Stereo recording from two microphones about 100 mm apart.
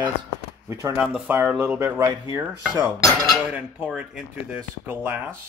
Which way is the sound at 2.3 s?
40° right (ahead or behind).